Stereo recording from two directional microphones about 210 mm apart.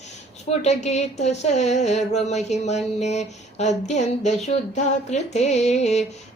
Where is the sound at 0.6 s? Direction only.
30° left (ahead or behind).